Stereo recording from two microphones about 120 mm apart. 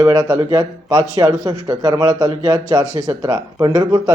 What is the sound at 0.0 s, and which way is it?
Speech, 30° right (ahead or behind).